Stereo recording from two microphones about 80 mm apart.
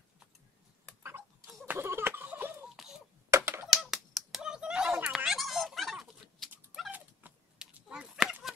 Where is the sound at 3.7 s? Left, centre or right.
Centre.